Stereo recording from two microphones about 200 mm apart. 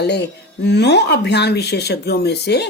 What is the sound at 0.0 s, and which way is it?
Speech, 55° left (ahead or behind).